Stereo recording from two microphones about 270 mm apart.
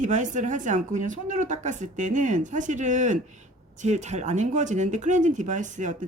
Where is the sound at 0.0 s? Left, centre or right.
Right.